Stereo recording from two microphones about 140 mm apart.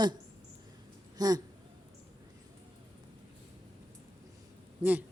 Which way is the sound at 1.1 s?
25° right (ahead or behind).